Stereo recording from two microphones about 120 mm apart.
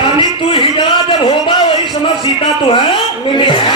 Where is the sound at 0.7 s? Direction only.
45° left (ahead or behind).